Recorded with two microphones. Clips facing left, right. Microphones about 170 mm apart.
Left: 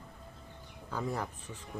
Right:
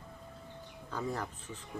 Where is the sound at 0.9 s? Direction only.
10° left (ahead or behind).